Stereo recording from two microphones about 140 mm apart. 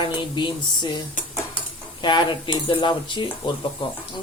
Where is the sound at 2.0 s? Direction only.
35° left (ahead or behind).